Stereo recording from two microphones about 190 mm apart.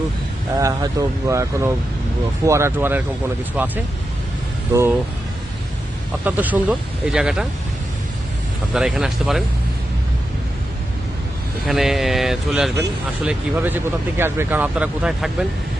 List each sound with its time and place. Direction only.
0.6 s speech: 15° right (ahead or behind)
6.2 s speech: 10° right (ahead or behind)
8.7 s speech: centre (ahead or behind)
11.6 s speech: centre (ahead or behind)